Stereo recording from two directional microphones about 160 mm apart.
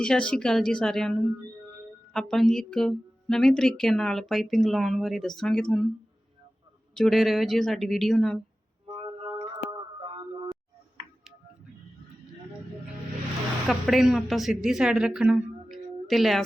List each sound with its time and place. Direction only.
0.0 s speech: 5° left (ahead or behind)
6.9 s speech: centre (ahead or behind)
10.0 s a sound: 30° right (ahead or behind)
13.7 s speech: centre (ahead or behind)